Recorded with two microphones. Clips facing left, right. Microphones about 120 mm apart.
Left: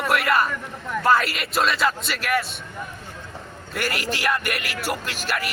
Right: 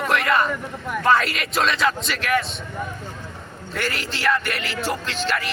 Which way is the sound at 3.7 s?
10° left (ahead or behind).